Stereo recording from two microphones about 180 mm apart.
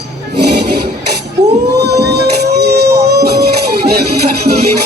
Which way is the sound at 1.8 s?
65° right (ahead or behind).